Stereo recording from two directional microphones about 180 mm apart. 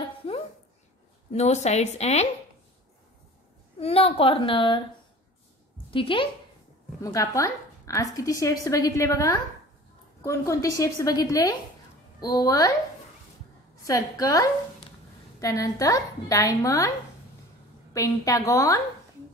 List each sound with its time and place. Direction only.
0.2 s a sound: 30° left (ahead or behind)
1.3 s a woman's voice: 40° left (ahead or behind)
3.8 s a woman's voice: 30° left (ahead or behind)
5.9 s a woman's voice: 30° left (ahead or behind)
7.0 s a woman's voice: 20° left (ahead or behind)
13.8 s a woman's voice: 20° left (ahead or behind)
17.9 s a woman's voice: 20° left (ahead or behind)